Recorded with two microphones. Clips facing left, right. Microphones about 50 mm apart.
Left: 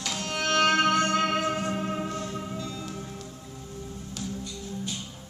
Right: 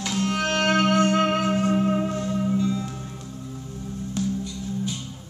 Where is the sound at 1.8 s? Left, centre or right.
Centre.